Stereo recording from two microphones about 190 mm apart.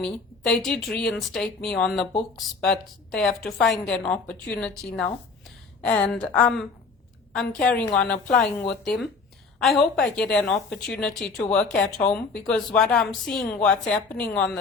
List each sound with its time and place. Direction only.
0.0 s a woman's voice: 5° left (ahead or behind)